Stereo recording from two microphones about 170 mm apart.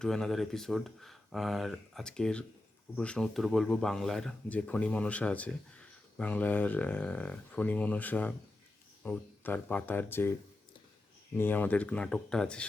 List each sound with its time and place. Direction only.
0.0 s speech: 5° left (ahead or behind)
11.3 s speech: 10° left (ahead or behind)